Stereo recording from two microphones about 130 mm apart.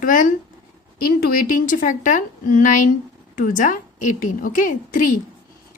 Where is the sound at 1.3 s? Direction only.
90° left.